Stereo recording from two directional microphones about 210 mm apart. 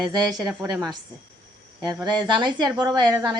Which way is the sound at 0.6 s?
15° right (ahead or behind).